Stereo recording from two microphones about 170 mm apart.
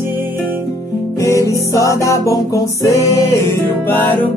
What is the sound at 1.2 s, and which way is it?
Music, 20° left (ahead or behind).